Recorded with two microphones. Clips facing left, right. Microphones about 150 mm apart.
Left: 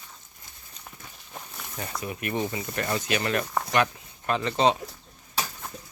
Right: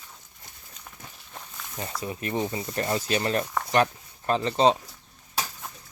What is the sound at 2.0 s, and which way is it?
Speech, 30° right (ahead or behind).